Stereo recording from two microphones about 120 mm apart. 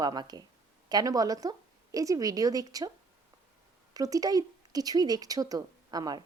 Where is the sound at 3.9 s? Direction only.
30° right (ahead or behind).